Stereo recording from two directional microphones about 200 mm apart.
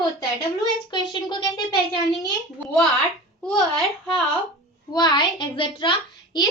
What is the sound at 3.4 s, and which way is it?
Speech, centre (ahead or behind).